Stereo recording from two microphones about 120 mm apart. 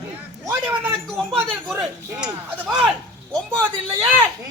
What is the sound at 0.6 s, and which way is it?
Speech, 15° right (ahead or behind).